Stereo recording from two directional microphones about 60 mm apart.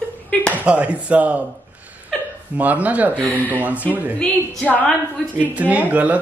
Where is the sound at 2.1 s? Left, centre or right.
Centre.